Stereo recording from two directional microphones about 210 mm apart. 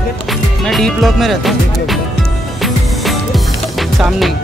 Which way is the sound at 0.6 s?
Centre (ahead or behind).